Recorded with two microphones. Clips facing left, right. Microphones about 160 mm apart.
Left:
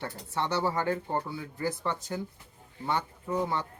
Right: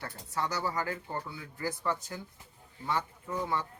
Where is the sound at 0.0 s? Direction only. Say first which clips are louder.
Left 3 dB; 25° left (ahead or behind).